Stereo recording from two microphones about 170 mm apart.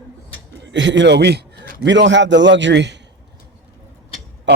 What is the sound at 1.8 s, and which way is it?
A man's voice, 90° right.